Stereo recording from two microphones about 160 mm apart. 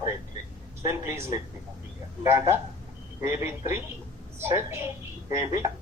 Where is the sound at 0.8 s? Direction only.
15° right (ahead or behind).